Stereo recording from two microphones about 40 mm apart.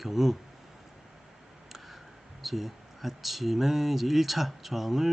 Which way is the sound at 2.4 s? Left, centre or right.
Centre.